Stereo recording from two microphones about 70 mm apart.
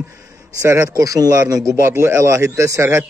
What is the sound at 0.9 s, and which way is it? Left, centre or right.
Speech, right.